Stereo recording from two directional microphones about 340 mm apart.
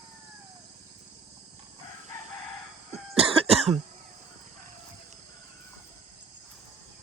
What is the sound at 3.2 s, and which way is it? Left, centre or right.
Cough, centre.